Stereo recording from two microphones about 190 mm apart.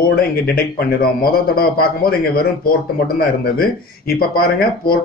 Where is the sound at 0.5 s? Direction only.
55° left (ahead or behind).